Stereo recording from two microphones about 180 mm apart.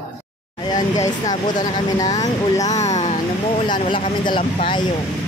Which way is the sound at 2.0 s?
20° left (ahead or behind).